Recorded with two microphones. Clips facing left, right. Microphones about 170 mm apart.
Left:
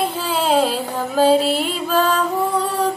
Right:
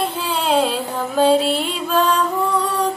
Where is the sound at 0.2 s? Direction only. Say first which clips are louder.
Left 2 dB; 45° left (ahead or behind).